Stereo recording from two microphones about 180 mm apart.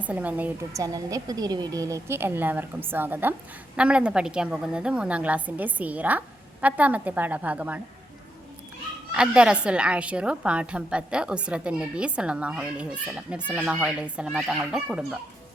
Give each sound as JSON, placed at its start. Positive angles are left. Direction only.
{"t": 0.0, "sound": "a woman's voice", "side_deg": -10}
{"t": 9.1, "sound": "a woman's voice", "side_deg": -5}